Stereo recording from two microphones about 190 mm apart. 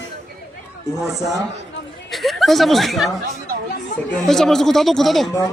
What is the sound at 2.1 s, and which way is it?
Speech, centre (ahead or behind).